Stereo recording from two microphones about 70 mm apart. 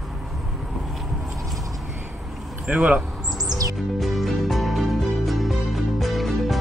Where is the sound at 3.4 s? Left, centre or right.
Right.